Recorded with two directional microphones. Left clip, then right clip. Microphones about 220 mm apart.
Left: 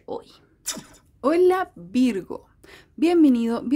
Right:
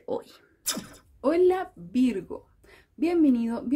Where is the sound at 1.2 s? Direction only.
30° left (ahead or behind).